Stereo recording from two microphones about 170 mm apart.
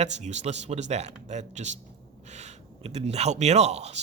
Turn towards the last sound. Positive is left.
turn(degrees=-40)  # may be behind; listen again after turning